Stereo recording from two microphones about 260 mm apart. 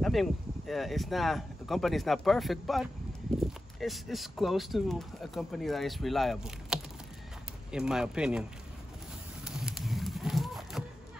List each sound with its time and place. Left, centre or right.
0.0 s speech: centre
9.4 s run: centre